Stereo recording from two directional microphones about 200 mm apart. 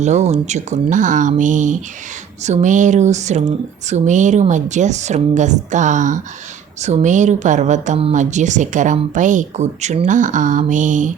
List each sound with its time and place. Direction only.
0.0 s speech: 35° right (ahead or behind)